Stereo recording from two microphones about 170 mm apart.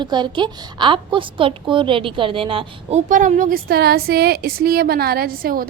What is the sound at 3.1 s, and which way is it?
A woman's voice, 50° right (ahead or behind).